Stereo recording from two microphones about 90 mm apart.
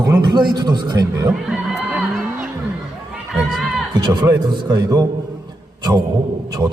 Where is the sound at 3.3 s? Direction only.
5° right (ahead or behind).